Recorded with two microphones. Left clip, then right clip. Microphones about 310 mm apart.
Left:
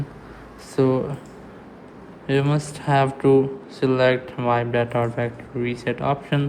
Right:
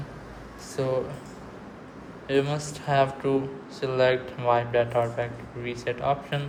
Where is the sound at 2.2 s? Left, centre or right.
Left.